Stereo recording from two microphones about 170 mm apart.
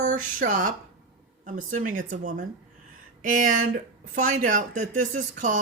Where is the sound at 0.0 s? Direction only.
50° right (ahead or behind).